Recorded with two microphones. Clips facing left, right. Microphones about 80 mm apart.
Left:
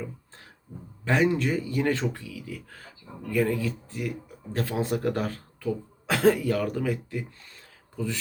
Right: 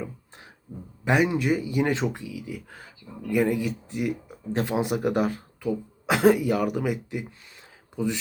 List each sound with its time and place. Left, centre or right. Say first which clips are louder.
0.0 s beatboxing: right 2 dB; centre
1.0 s speech: right 1 dB; centre